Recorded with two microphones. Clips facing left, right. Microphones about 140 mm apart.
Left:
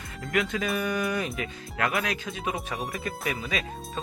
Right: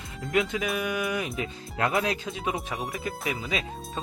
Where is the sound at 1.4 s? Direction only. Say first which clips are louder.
Right 1 dB; 25° right (ahead or behind).